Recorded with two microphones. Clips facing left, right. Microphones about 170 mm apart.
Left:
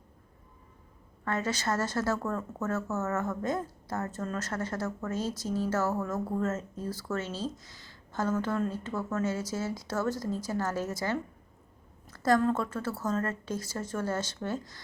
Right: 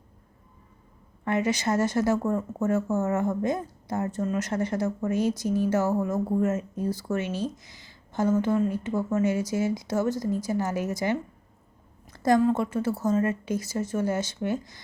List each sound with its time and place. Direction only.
1.2 s a woman's voice: 15° right (ahead or behind)